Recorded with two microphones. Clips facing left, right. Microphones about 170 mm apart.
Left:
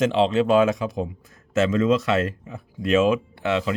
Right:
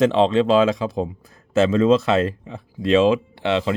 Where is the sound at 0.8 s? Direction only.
30° right (ahead or behind).